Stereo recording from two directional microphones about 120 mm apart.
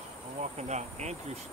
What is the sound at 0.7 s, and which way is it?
Speech, 70° right (ahead or behind).